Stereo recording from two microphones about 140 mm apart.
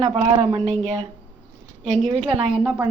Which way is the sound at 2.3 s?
40° right (ahead or behind).